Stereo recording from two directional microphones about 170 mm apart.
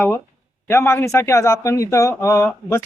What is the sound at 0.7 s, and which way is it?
Speech, 15° left (ahead or behind).